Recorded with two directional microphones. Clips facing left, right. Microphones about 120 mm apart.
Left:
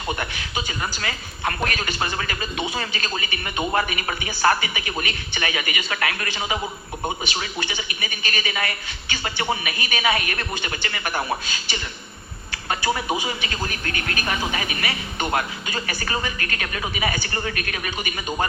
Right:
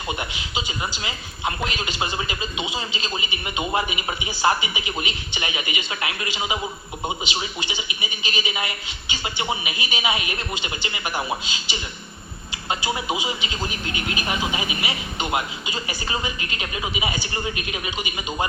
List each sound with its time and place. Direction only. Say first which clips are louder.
0.2 s speech: left 1 dB; 15° right (ahead or behind)